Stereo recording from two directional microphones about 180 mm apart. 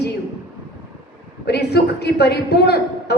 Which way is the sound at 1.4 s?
65° left (ahead or behind).